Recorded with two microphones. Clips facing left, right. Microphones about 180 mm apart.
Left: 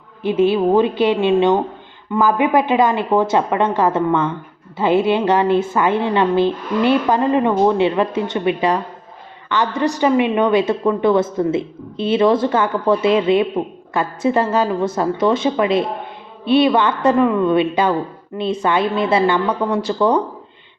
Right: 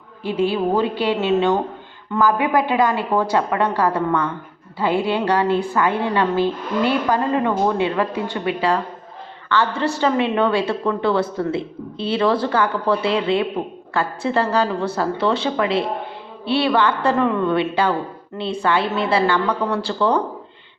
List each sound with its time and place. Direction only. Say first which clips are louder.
0.2 s a woman's voice: left 5 dB; 20° left (ahead or behind)